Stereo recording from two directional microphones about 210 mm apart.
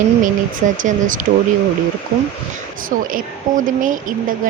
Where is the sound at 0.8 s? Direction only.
40° right (ahead or behind).